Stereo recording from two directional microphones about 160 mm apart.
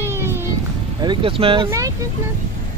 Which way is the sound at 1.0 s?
30° right (ahead or behind).